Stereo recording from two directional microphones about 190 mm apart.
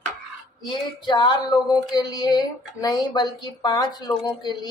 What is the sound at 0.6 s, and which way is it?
Speech, 25° left (ahead or behind).